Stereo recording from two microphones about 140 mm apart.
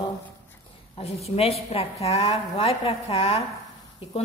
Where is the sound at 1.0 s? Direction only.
45° left (ahead or behind).